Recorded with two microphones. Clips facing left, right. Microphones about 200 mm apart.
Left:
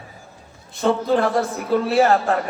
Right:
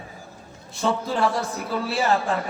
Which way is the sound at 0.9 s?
55° left (ahead or behind).